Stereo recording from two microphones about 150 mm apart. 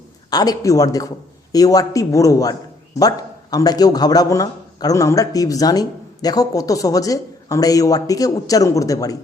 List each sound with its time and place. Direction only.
0.3 s a man's voice: 25° left (ahead or behind)